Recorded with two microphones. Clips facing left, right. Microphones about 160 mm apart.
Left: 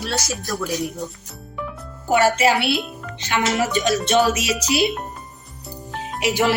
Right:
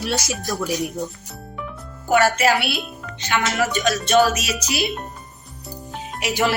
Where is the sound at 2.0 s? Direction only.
25° left (ahead or behind).